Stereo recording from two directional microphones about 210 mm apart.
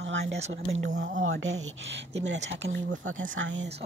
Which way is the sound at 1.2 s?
65° right (ahead or behind).